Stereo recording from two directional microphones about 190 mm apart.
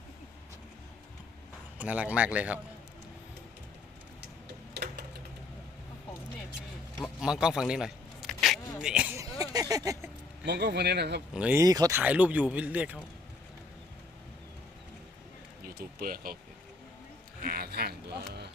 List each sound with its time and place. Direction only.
1.8 s speech: 5° right (ahead or behind)
4.7 s a sound: 60° right (ahead or behind)
7.0 s speech: 5° right (ahead or behind)
10.4 s speech: 60° right (ahead or behind)
11.3 s speech: 5° right (ahead or behind)
11.6 s speech: 20° right (ahead or behind)
15.6 s speech: 50° right (ahead or behind)
17.4 s a sound: 50° right (ahead or behind)